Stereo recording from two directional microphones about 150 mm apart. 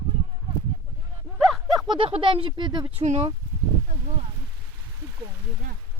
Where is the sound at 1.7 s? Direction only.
30° right (ahead or behind).